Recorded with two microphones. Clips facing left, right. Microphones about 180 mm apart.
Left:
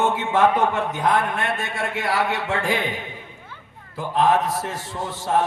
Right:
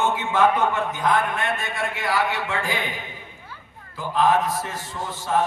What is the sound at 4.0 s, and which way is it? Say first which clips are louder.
A man's voice: left 1 dB; 70° left (ahead or behind).